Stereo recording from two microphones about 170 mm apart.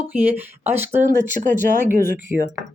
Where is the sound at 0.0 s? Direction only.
10° right (ahead or behind).